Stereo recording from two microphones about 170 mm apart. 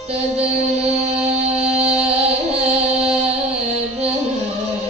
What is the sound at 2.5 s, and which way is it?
Child singing, 40° right (ahead or behind).